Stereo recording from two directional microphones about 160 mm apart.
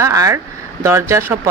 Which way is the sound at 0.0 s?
20° right (ahead or behind).